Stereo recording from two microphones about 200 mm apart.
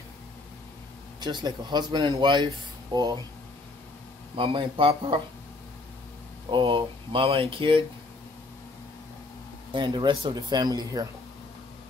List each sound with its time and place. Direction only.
1.2 s speech: 20° right (ahead or behind)
4.4 s speech: 25° right (ahead or behind)
6.5 s speech: 25° right (ahead or behind)
9.7 s speech: 25° right (ahead or behind)